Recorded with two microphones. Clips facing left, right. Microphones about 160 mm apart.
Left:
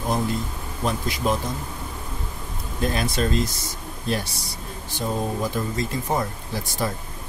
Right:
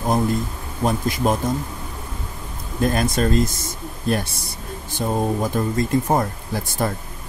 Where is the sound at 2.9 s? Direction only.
45° right (ahead or behind).